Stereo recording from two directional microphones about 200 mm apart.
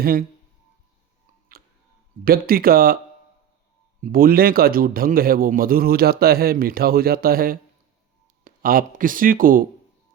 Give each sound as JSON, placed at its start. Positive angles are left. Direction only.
{"t": 0.0, "sound": "a man's voice", "side_deg": -45}
{"t": 2.2, "sound": "a man's voice", "side_deg": -45}
{"t": 4.0, "sound": "a man's voice", "side_deg": -45}